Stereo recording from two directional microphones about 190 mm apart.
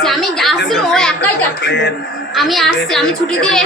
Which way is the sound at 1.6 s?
65° left (ahead or behind).